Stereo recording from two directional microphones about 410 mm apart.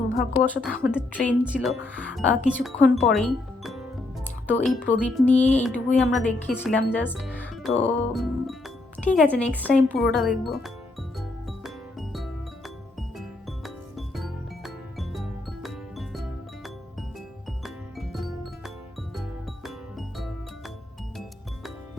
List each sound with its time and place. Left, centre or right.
0.2 s speech: centre
2.8 s music: centre
5.0 s speech: centre
7.7 s music: centre
8.1 s speech: centre
11.2 s music: centre
17.6 s music: centre